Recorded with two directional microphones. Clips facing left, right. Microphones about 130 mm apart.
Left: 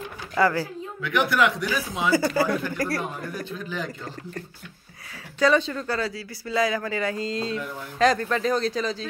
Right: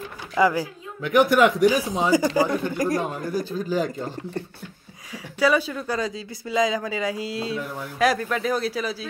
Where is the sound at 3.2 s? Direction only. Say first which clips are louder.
Right 6 dB; 35° right (ahead or behind).